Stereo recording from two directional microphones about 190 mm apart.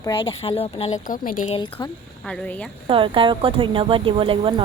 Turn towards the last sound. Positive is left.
turn(degrees=-25)  # may be behind; listen again after turning